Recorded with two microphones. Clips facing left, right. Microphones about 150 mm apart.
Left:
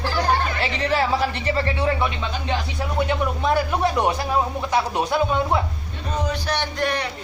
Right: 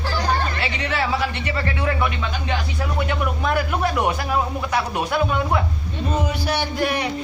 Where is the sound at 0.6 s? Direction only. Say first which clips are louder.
Left 2 dB; 35° left (ahead or behind).